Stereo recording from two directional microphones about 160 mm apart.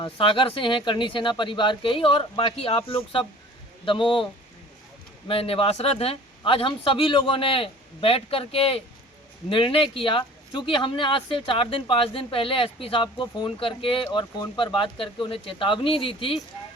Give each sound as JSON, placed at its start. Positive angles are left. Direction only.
{"t": 0.0, "sound": "speech", "side_deg": 30}
{"t": 5.3, "sound": "speech", "side_deg": 35}